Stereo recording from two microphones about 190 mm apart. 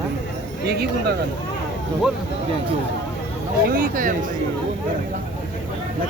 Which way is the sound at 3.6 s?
45° right (ahead or behind).